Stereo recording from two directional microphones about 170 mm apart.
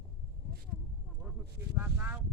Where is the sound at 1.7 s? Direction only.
10° right (ahead or behind).